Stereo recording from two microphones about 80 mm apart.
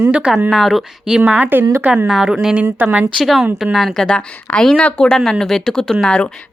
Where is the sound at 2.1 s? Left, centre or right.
Centre.